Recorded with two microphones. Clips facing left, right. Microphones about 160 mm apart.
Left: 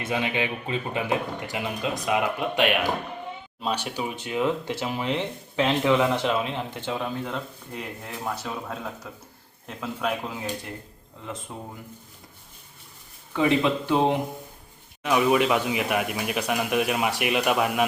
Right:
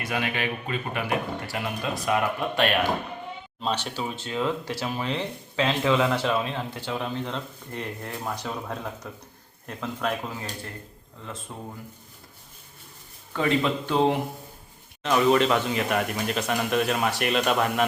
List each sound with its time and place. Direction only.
0.0 s speech: 20° left (ahead or behind)
13.3 s speech: 15° left (ahead or behind)